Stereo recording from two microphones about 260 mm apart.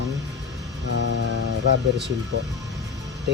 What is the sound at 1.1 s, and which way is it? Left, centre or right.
Speech, right.